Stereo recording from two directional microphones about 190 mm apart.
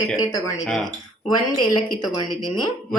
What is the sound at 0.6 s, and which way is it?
Speech, centre (ahead or behind).